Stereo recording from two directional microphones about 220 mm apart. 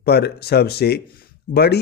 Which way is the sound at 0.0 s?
50° left (ahead or behind).